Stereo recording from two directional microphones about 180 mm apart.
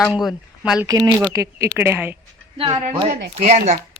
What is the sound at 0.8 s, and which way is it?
Speech, 15° right (ahead or behind).